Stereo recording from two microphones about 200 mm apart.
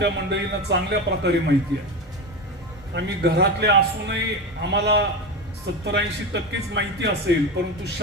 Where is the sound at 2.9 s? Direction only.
60° right (ahead or behind).